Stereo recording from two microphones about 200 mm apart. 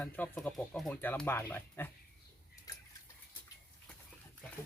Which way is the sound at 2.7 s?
20° left (ahead or behind).